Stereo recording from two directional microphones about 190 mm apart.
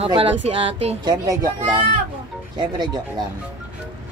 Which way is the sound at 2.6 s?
25° right (ahead or behind).